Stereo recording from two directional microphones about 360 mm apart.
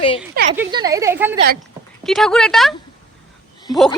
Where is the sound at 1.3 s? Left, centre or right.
Right.